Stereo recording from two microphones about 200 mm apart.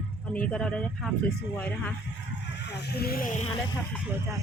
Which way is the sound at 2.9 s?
50° left (ahead or behind).